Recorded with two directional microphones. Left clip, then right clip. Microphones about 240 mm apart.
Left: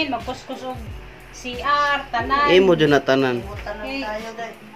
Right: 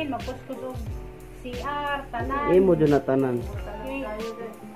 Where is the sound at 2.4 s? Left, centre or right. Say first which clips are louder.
Left 4 dB; centre.